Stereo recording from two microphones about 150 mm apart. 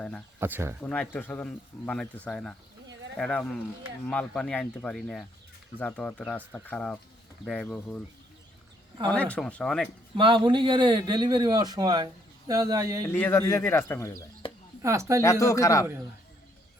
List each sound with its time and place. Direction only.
0.3 s speech: 15° right (ahead or behind)
0.8 s speech: 10° left (ahead or behind)
9.0 s speech: 10° left (ahead or behind)
10.2 s a man's voice: 35° right (ahead or behind)
13.1 s speech: 15° left (ahead or behind)
14.4 s a sound: 35° left (ahead or behind)
14.8 s speech: 20° right (ahead or behind)
15.2 s speech: 20° left (ahead or behind)